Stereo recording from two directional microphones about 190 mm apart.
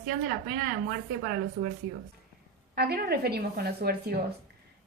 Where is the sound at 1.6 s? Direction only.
55° right (ahead or behind).